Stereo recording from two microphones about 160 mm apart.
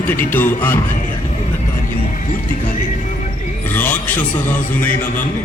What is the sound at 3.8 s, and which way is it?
Speech, 10° left (ahead or behind).